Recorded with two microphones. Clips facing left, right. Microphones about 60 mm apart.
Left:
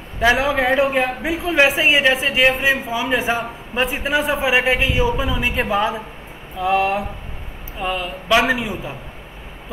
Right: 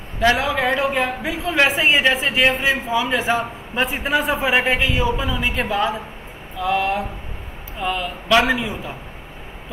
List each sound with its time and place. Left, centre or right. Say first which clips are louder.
0.2 s a man's voice: left 1 dB; centre
3.7 s a man's voice: left 1 dB; centre